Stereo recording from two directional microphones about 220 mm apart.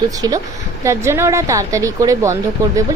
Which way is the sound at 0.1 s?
15° right (ahead or behind).